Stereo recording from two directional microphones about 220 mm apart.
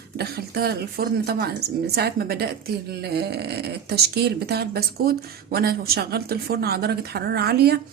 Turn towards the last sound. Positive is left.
turn(degrees=-45)  # may be behind; listen again after turning